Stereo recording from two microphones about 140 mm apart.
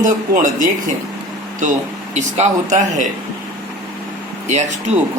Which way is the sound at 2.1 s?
55° right (ahead or behind).